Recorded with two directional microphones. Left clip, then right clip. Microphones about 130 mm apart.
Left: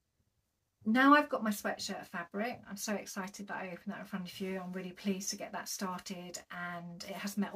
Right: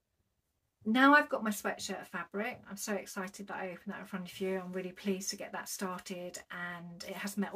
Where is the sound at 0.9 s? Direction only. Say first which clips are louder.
Right 1 dB; 30° right (ahead or behind).